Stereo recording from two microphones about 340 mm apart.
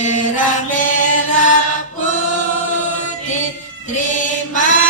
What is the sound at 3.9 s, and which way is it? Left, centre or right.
Mantra, left.